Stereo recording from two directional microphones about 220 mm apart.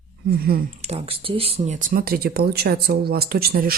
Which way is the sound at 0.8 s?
25° right (ahead or behind).